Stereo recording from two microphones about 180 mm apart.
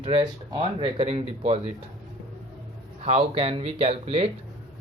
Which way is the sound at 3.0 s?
30° right (ahead or behind).